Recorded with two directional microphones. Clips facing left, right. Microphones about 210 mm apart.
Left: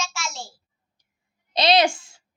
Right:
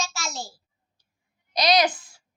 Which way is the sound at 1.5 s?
25° left (ahead or behind).